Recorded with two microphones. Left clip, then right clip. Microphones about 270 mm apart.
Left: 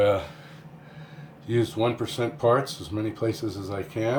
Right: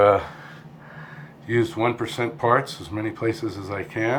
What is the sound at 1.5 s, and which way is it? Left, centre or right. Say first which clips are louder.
Speech: right 3 dB; centre.